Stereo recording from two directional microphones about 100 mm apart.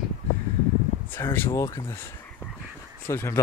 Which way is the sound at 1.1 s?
25° left (ahead or behind).